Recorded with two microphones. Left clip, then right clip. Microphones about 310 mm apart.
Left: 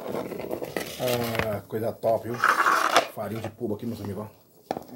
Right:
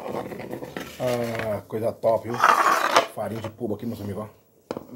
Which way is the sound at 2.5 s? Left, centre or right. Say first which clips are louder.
Right 2 dB; centre.